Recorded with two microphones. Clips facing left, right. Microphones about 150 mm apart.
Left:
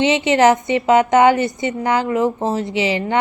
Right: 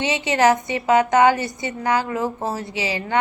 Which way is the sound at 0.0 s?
25° left (ahead or behind).